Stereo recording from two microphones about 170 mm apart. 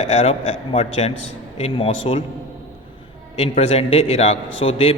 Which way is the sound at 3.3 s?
35° left (ahead or behind).